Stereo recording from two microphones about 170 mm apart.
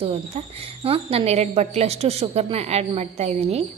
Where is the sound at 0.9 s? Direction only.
35° right (ahead or behind).